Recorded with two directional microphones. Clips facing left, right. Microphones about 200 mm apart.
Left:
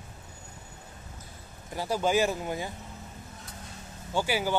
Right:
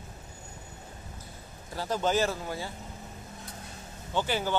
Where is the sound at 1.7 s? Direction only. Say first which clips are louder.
Left 2 dB; 10° left (ahead or behind).